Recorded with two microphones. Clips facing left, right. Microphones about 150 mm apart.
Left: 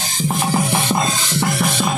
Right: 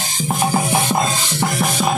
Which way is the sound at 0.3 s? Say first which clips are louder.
Right 2 dB; 15° right (ahead or behind).